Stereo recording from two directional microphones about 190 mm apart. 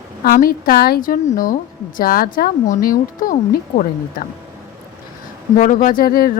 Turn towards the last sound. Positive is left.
turn(degrees=50)  # may be behind; listen again after turning